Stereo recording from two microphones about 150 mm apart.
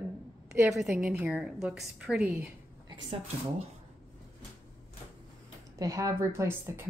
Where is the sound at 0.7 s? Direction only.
5° right (ahead or behind).